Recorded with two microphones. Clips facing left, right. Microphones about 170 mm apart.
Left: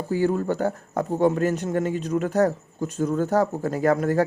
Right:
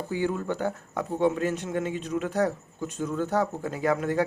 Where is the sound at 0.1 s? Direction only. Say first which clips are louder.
Left 6 dB; 40° left (ahead or behind).